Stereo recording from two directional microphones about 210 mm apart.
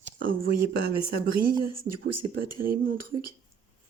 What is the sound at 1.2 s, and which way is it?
Speech, 45° right (ahead or behind).